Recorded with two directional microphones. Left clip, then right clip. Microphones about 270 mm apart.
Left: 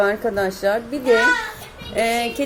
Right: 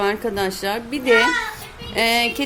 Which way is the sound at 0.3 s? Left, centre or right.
Centre.